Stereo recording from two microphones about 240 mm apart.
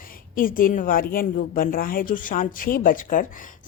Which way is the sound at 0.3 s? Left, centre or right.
Left.